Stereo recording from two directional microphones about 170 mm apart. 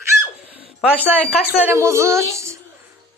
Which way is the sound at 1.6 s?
15° right (ahead or behind).